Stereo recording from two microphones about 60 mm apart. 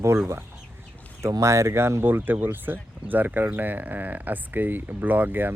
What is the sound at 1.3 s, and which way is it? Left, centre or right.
Speech, right.